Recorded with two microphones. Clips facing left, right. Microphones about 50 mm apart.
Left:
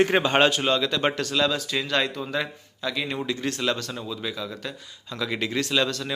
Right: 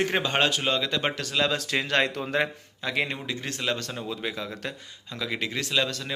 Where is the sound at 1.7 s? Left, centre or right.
Right.